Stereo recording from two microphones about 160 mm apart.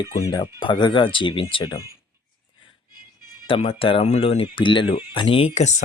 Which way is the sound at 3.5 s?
35° left (ahead or behind).